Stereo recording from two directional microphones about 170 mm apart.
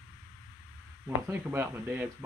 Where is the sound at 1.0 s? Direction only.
10° right (ahead or behind).